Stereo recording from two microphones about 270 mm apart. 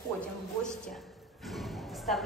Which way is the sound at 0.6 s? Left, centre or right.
Centre.